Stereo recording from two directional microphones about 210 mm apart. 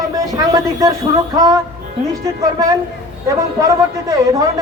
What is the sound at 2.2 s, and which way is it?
A man's voice, 15° right (ahead or behind).